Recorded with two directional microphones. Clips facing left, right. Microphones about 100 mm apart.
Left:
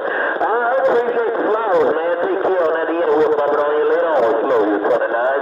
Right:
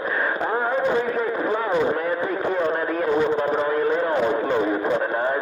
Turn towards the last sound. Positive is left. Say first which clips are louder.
# left 6 dB
turn(degrees=35)  # may be behind; listen again after turning